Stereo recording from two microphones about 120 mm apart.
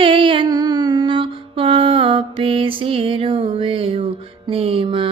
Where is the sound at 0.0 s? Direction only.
45° right (ahead or behind).